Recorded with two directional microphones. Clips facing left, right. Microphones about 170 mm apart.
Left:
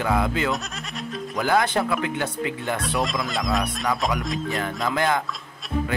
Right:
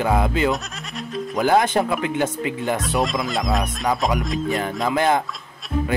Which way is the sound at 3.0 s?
Centre (ahead or behind).